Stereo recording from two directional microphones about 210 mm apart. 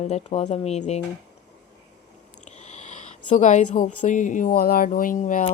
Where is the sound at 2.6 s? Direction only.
35° left (ahead or behind).